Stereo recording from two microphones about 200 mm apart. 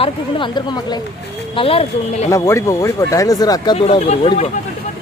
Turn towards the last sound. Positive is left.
turn(degrees=30)  # may be behind; listen again after turning